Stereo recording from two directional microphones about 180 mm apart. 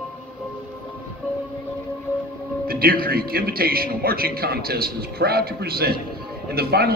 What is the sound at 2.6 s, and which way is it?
A man's voice, 55° right (ahead or behind).